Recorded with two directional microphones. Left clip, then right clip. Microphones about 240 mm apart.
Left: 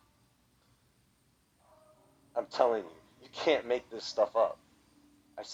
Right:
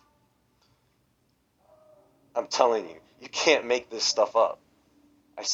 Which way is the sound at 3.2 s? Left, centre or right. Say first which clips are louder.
Right 7 dB; right.